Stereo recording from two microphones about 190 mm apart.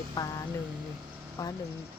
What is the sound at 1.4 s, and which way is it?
Speech, 15° left (ahead or behind).